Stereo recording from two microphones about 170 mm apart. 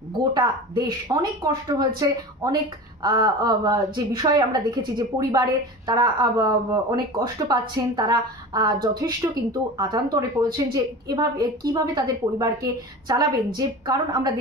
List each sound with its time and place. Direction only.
0.2 s a woman's voice: 25° right (ahead or behind)
3.0 s a woman's voice: 25° right (ahead or behind)